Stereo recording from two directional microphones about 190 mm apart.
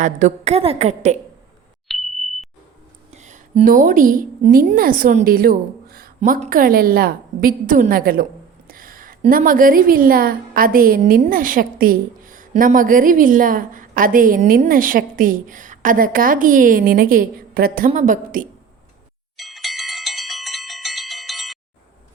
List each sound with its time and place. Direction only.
0.0 s a woman's voice: 40° right (ahead or behind)
1.9 s sonar: centre (ahead or behind)
3.1 s a woman's voice: 40° right (ahead or behind)
19.4 s bell: centre (ahead or behind)